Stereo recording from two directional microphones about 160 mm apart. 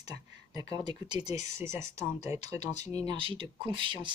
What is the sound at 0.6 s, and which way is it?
Speech, 25° right (ahead or behind).